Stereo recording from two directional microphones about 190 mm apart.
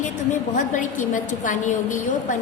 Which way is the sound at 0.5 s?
40° left (ahead or behind).